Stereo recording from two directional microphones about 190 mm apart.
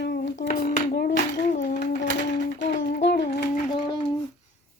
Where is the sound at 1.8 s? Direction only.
70° left (ahead or behind).